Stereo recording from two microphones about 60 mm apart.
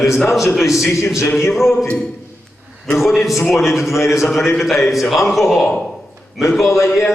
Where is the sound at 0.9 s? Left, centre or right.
Left.